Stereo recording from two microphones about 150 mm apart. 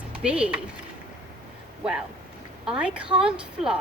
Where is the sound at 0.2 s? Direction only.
5° right (ahead or behind).